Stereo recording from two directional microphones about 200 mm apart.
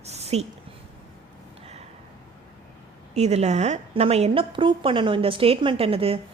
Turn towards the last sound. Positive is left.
turn(degrees=-30)  # may be behind; listen again after turning